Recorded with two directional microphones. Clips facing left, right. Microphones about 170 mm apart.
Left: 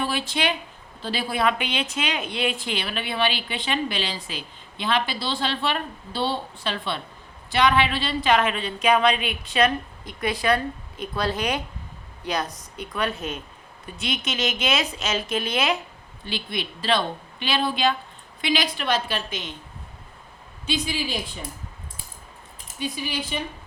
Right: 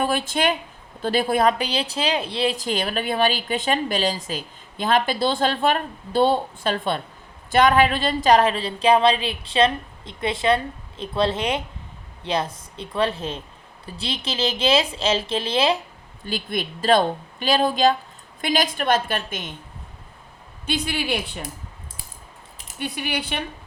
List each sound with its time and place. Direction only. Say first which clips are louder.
0.0 s a woman's voice: right 4 dB; 50° right (ahead or behind); by 15.8 s 30° right (ahead or behind)
16.2 s speech: right 3 dB; 45° right (ahead or behind)
20.7 s speech: right 2 dB; 60° right (ahead or behind)
22.5 s speech: right 1 dB; 65° right (ahead or behind)